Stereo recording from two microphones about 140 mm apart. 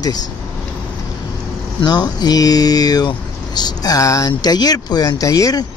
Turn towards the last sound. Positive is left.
turn(degrees=25)  # may be behind; listen again after turning